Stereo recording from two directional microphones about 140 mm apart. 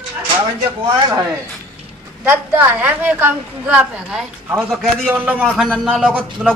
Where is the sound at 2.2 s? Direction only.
15° right (ahead or behind).